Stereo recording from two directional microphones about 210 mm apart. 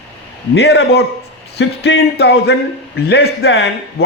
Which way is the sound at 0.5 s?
50° left (ahead or behind).